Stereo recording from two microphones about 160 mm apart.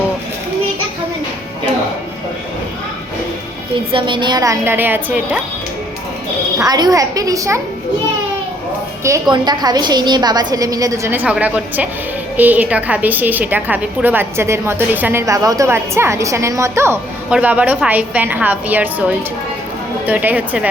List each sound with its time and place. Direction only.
3.9 s a woman's voice: 30° right (ahead or behind); by 5.4 s 10° right (ahead or behind)
6.6 s a woman's voice: 25° right (ahead or behind)
9.0 s a woman's voice: 25° right (ahead or behind)